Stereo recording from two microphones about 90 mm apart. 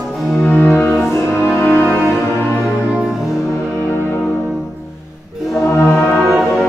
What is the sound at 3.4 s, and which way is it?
Music, 35° left (ahead or behind).